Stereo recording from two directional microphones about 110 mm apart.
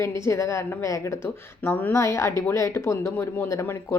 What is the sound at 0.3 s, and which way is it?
Speech, 25° left (ahead or behind).